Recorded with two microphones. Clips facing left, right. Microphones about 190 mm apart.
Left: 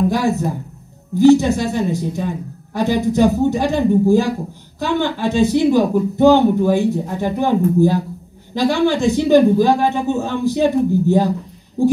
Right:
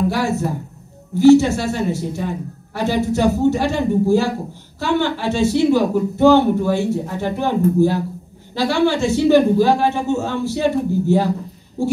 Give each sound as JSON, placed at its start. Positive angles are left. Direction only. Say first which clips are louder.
{"t": 0.1, "sound": "speech", "louder": "left 2 dB", "side_deg": 15}